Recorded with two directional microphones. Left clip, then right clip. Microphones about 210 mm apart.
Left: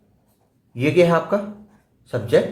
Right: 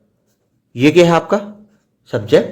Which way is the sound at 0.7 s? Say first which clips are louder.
Right 6 dB; 45° right (ahead or behind).